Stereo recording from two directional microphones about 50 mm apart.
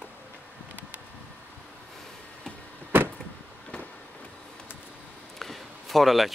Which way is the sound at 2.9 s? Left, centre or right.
Right.